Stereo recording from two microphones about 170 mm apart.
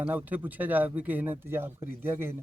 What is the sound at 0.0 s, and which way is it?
A man's voice, 10° right (ahead or behind).